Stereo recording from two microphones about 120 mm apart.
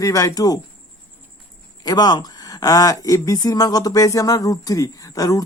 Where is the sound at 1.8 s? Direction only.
35° left (ahead or behind).